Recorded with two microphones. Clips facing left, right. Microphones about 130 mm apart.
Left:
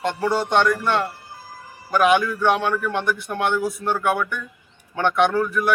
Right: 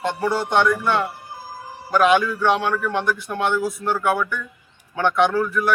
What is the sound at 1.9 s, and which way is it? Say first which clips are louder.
A man's voice: right 1 dB; 10° left (ahead or behind).